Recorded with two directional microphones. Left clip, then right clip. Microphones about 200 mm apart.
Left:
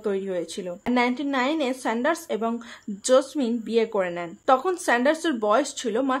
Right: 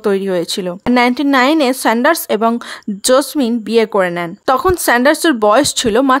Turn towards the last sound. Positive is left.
turn(degrees=-45)  # may be behind; listen again after turning